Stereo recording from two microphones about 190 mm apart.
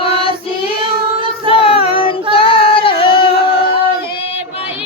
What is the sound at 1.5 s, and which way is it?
Child singing, 30° left (ahead or behind).